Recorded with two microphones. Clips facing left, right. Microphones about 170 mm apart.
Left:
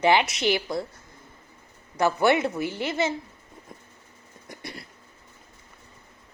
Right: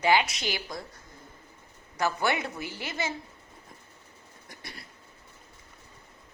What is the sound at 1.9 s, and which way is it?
A woman's voice, 25° left (ahead or behind).